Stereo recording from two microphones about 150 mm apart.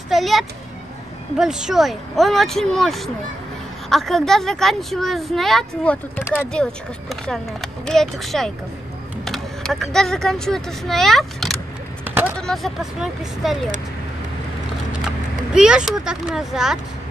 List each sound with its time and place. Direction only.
0.1 s a sound: centre (ahead or behind)
1.4 s speech: 5° right (ahead or behind); by 6.5 s 15° left (ahead or behind)
6.5 s speech: 5° left (ahead or behind)
12.1 s vehicle: 15° right (ahead or behind)
12.4 s speech: centre (ahead or behind)
15.5 s speech: 5° right (ahead or behind)